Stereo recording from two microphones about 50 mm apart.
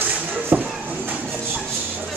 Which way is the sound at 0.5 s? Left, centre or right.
Right.